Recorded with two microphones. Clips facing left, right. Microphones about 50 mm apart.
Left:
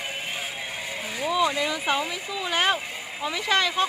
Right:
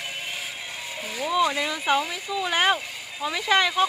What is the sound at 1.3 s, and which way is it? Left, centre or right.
Speech, centre.